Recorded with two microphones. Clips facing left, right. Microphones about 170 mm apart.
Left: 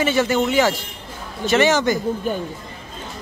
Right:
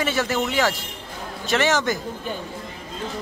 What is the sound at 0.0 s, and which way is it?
A man's voice, centre (ahead or behind).